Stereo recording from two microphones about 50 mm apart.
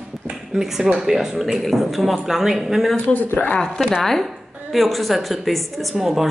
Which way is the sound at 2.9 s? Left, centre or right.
Left.